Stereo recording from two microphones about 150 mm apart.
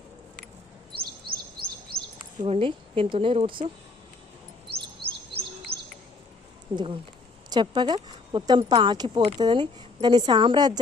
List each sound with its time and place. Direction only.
0.9 s chirp: 90° right
2.4 s speech: 40° right (ahead or behind)
5.7 s bird vocalization: 90° right
6.7 s speech: 35° right (ahead or behind)